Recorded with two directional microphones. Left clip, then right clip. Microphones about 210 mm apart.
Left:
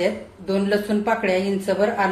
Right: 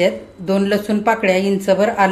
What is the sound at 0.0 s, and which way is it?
Speech, 35° right (ahead or behind).